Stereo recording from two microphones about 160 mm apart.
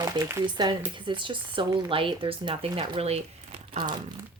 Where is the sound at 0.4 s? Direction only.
30° right (ahead or behind).